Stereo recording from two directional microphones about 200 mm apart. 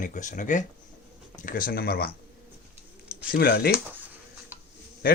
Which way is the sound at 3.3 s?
50° left (ahead or behind).